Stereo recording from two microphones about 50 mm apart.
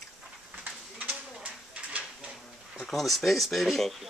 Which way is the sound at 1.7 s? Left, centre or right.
Right.